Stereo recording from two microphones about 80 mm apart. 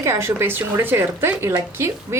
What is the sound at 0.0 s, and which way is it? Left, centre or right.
A woman's voice, right.